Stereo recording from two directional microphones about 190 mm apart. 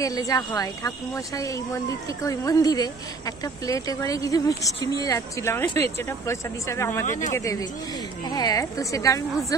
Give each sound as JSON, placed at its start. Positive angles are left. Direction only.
{"t": 0.0, "sound": "speech", "side_deg": 20}